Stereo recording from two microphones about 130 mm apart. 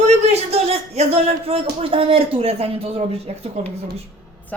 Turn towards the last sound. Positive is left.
turn(degrees=10)  # may be behind; listen again after turning